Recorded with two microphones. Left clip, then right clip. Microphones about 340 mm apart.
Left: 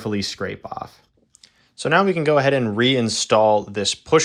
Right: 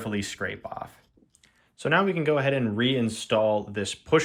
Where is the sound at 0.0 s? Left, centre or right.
Centre.